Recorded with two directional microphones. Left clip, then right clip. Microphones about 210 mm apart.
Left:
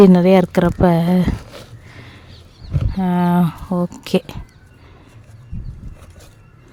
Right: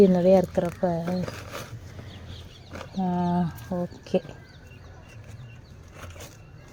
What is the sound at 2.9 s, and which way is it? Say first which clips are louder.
Speech: left 8 dB; 30° left (ahead or behind).